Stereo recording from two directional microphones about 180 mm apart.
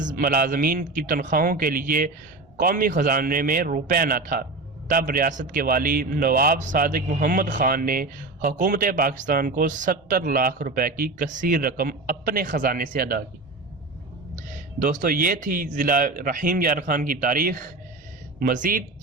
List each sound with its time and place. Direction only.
0.0 s a man's voice: 50° right (ahead or behind)
14.3 s a man's voice: 45° right (ahead or behind)